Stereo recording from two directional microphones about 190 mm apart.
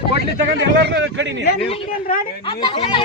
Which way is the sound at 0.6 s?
70° right (ahead or behind).